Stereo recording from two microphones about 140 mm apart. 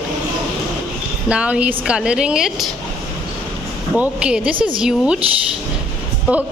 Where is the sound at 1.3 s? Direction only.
10° right (ahead or behind).